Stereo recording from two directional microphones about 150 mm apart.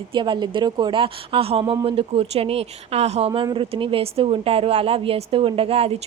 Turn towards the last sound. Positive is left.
turn(degrees=-40)  # may be behind; listen again after turning